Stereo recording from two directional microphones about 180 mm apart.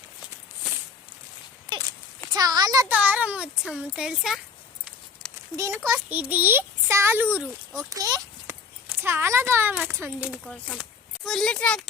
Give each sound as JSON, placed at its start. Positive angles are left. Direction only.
{"t": 2.3, "sound": "a sound", "side_deg": -20}
{"t": 2.9, "sound": "a child's voice", "side_deg": -5}
{"t": 5.5, "sound": "a child's voice", "side_deg": -15}
{"t": 10.4, "sound": "speech", "side_deg": 5}